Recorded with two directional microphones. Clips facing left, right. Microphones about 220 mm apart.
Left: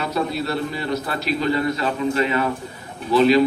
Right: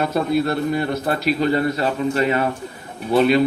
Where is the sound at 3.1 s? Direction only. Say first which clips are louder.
Even; 55° right (ahead or behind).